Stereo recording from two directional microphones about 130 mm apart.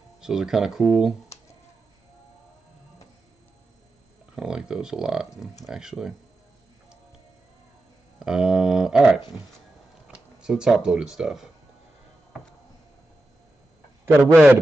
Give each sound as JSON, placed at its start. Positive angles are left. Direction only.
{"t": 0.2, "sound": "speech", "side_deg": -5}
{"t": 4.4, "sound": "a sound", "side_deg": -5}
{"t": 5.7, "sound": "speech", "side_deg": -5}
{"t": 8.2, "sound": "a sound", "side_deg": -5}
{"t": 10.1, "sound": "speech", "side_deg": -5}
{"t": 14.3, "sound": "a man's voice", "side_deg": -15}